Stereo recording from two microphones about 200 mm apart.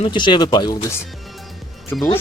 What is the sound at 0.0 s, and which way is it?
Speech, 25° left (ahead or behind).